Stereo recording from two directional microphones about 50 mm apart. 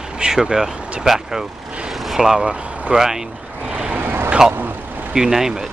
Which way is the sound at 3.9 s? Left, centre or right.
Right.